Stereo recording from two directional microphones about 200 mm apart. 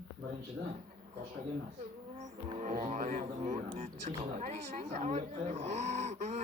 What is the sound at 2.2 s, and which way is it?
Speech, 35° right (ahead or behind).